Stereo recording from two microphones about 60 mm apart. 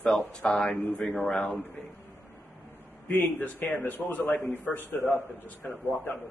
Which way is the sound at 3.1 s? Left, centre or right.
Left.